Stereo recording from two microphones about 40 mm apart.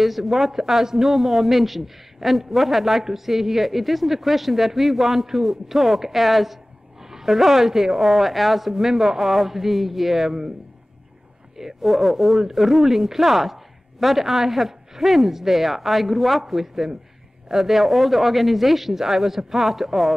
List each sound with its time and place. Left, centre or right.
0.0 s a man's voice: centre
11.5 s speech: centre